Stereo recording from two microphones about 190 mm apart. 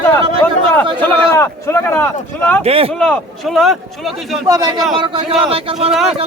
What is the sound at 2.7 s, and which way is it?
Speech, 30° right (ahead or behind).